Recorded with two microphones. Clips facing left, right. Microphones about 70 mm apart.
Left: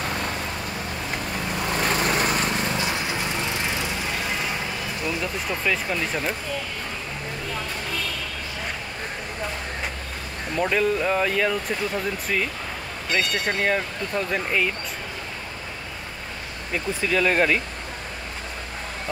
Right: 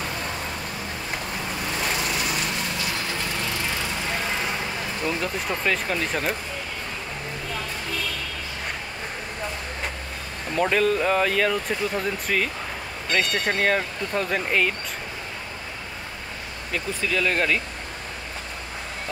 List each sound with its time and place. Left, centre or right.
1.8 s vehicle: left
2.8 s lawn mower: left
5.2 s speech: centre
10.5 s speech: centre
16.7 s speech: centre